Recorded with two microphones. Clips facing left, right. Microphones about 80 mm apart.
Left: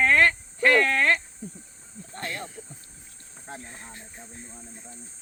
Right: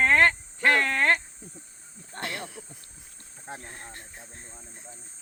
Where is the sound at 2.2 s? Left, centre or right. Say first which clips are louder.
Even; right.